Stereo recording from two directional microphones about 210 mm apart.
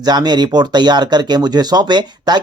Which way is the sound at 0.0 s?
20° right (ahead or behind).